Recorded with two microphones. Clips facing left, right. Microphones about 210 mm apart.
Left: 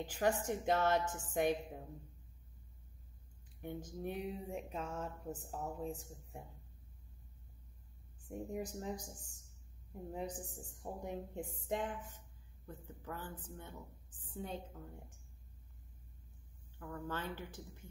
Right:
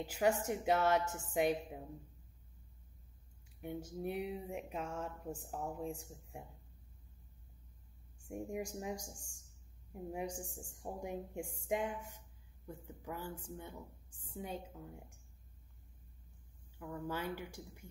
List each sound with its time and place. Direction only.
0.0 s speech: 10° right (ahead or behind)
3.6 s speech: 10° right (ahead or behind)
8.3 s speech: 10° right (ahead or behind)
10.1 s a woman's voice: 10° right (ahead or behind)
16.7 s speech: 10° right (ahead or behind)